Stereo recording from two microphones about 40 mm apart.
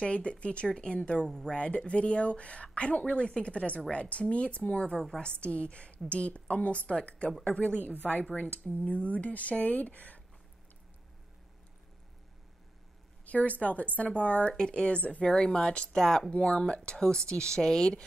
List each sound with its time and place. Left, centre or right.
0.0 s speech: left
1.2 s speech: centre
1.5 s speech: left
13.2 s speech: left
14.5 s speech: left
16.0 s speech: centre
16.4 s speech: left